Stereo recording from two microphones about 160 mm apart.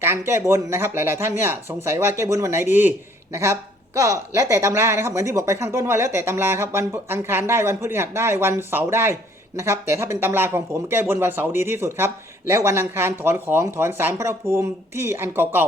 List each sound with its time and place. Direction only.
0.0 s speech: 15° right (ahead or behind)